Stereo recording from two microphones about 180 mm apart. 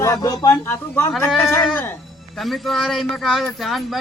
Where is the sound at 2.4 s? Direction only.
Centre (ahead or behind).